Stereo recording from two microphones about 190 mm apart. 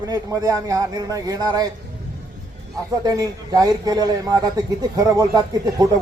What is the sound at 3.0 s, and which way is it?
Speech, 20° right (ahead or behind).